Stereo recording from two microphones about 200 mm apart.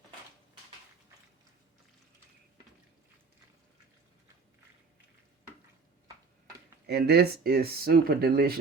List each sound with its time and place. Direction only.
6.8 s speech: 55° right (ahead or behind)